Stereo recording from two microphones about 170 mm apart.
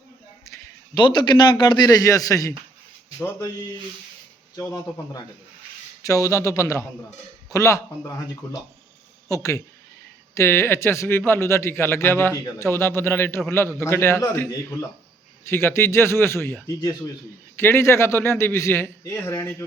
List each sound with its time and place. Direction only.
0.4 s a sound: 15° left (ahead or behind)
0.9 s a man's voice: 30° left (ahead or behind)
4.5 s a man's voice: 20° left (ahead or behind)
9.3 s a man's voice: 20° left (ahead or behind)